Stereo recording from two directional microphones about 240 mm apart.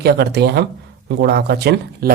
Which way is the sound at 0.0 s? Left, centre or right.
Right.